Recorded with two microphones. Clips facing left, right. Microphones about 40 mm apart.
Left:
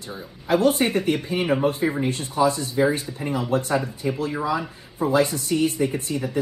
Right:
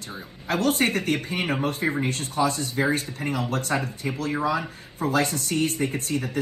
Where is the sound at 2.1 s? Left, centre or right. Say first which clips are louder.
Left 3 dB; right.